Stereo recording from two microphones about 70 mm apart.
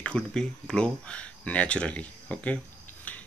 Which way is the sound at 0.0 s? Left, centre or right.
Centre.